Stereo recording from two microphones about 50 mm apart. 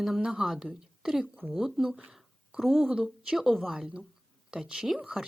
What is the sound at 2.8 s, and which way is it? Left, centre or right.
Speech, right.